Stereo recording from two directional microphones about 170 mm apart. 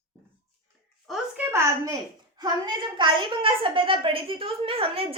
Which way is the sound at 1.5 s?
20° right (ahead or behind).